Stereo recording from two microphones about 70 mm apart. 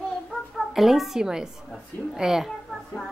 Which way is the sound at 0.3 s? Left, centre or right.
Centre.